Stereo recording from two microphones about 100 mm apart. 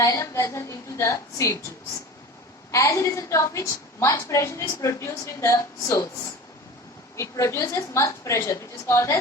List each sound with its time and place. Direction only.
0.0 s a woman's voice: 30° left (ahead or behind)
2.7 s a woman's voice: 30° left (ahead or behind)
7.2 s a woman's voice: 30° left (ahead or behind)